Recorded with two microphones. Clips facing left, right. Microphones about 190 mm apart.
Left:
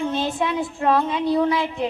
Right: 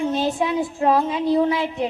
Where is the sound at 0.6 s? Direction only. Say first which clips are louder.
Right 1 dB; 20° right (ahead or behind).